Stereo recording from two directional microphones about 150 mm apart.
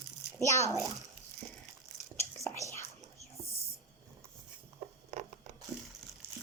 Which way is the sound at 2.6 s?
20° left (ahead or behind).